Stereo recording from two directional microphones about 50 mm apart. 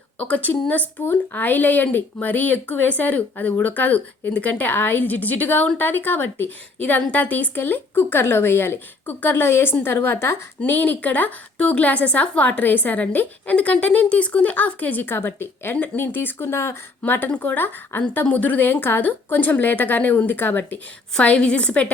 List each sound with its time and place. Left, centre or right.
0.2 s a woman's voice: left
6.7 s speech: left
10.6 s a woman's voice: left
17.0 s a woman's voice: left
21.2 s a woman's voice: left